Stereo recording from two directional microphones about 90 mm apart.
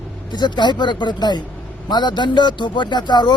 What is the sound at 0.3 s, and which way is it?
Speech, 55° left (ahead or behind).